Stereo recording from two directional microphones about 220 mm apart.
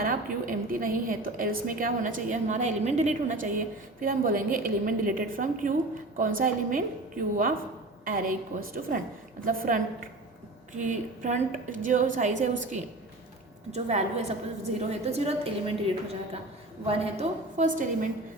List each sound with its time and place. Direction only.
0.0 s a woman's voice: 40° right (ahead or behind)
16.8 s a woman's voice: 25° right (ahead or behind)